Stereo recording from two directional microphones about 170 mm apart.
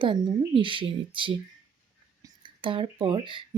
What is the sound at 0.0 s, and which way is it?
Speech, 30° right (ahead or behind).